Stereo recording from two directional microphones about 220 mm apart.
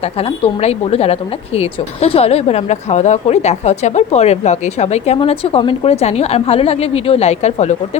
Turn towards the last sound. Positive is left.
turn(degrees=30)  # may be behind; listen again after turning